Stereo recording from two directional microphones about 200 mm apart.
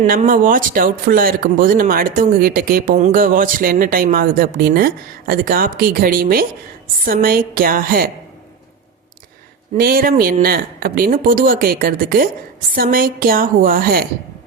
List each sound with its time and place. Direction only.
0.0 s a man's voice: 40° right (ahead or behind)
9.7 s a man's voice: 50° right (ahead or behind)